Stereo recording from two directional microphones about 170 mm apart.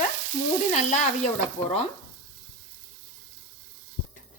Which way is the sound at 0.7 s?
45° left (ahead or behind).